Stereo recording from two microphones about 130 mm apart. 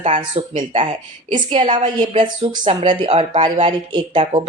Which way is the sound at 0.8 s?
40° right (ahead or behind).